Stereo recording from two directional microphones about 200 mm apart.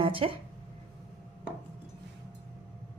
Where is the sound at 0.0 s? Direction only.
25° right (ahead or behind).